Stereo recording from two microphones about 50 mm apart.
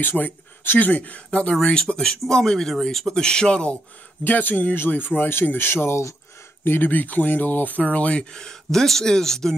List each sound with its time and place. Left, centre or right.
0.2 s speech: centre
0.7 s speech: left; by 3.7 s centre
4.2 s speech: left
8.3 s speech: centre